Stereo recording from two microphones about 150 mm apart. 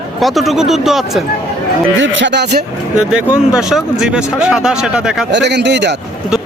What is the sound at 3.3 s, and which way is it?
Speech, 5° right (ahead or behind).